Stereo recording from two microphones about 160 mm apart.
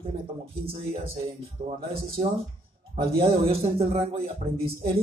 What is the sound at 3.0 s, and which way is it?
Speech, 35° right (ahead or behind).